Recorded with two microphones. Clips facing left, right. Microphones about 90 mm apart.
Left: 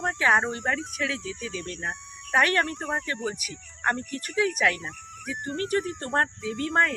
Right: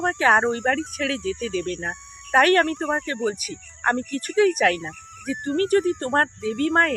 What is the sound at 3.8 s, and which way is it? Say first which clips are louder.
Speech: right 5 dB; 45° right (ahead or behind).